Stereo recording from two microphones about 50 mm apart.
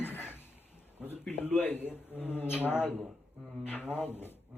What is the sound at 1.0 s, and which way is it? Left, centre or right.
Speech, left.